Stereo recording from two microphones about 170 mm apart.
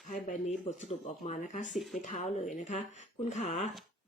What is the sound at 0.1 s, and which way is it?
Speech, 50° left (ahead or behind).